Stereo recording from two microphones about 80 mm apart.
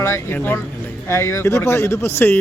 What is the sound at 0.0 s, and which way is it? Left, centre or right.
Speech, left.